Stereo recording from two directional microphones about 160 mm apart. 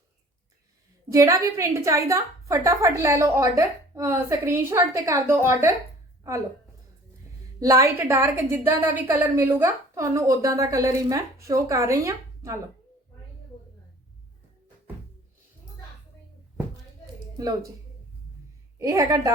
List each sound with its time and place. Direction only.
1.1 s a woman's voice: 20° right (ahead or behind)
7.6 s a woman's voice: 20° right (ahead or behind)
17.3 s speech: 20° right (ahead or behind)
18.8 s a woman's voice: 20° right (ahead or behind)